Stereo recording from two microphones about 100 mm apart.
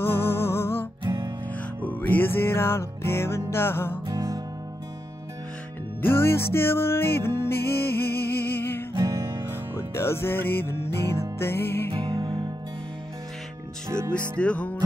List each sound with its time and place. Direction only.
0.0 s music: 25° left (ahead or behind)
1.0 s music: 50° right (ahead or behind)
1.9 s music: 20° left (ahead or behind)
4.1 s music: 35° right (ahead or behind)
6.0 s music: 25° left (ahead or behind)
8.9 s music: 35° right (ahead or behind)
9.5 s music: 25° left (ahead or behind)
13.8 s music: 25° right (ahead or behind)
14.1 s music: 10° left (ahead or behind)